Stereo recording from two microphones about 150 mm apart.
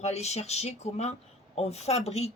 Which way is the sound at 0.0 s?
45° left (ahead or behind).